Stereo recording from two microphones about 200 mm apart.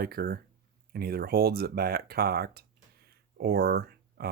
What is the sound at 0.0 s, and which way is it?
Speech, 50° right (ahead or behind).